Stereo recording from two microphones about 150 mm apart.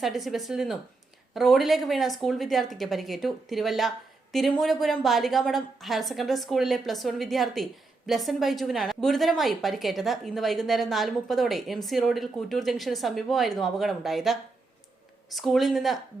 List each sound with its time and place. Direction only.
0.0 s speech: centre (ahead or behind)
15.4 s speech: centre (ahead or behind)